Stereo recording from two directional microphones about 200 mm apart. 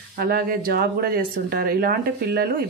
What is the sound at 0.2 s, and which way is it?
Speech, 45° right (ahead or behind).